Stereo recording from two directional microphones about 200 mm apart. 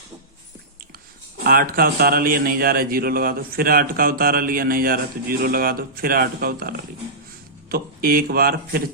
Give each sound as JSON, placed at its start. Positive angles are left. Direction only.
{"t": 1.5, "sound": "a man's voice", "side_deg": -45}